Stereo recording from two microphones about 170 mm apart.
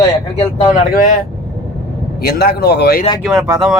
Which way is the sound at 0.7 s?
50° left (ahead or behind).